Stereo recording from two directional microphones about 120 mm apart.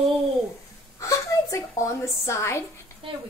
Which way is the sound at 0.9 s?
25° left (ahead or behind).